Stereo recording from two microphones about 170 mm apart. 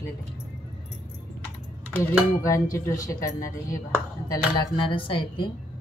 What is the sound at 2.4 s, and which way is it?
Speech, 20° left (ahead or behind).